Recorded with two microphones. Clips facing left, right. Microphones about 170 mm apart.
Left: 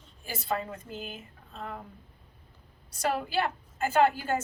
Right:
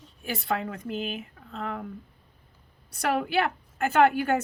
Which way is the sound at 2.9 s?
65° right (ahead or behind).